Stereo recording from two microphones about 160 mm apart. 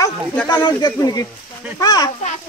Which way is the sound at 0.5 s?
25° left (ahead or behind).